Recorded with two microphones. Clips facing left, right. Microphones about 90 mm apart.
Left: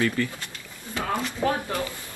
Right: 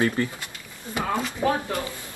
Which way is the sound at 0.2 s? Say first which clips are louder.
Right 1 dB; 30° right (ahead or behind).